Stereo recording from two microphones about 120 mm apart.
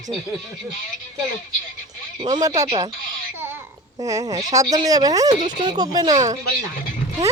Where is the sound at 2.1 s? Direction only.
35° right (ahead or behind).